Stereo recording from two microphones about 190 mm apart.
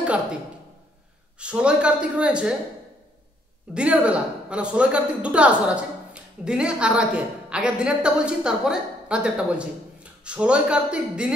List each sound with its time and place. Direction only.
0.0 s a woman's voice: 5° right (ahead or behind)
1.4 s a man's voice: 5° right (ahead or behind)
3.7 s a man's voice: 5° right (ahead or behind)